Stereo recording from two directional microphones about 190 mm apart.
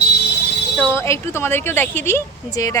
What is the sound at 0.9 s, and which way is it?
A woman's voice, 15° left (ahead or behind).